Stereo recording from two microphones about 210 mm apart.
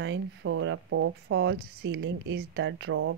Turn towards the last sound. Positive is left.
turn(degrees=-70)  # may be behind; listen again after turning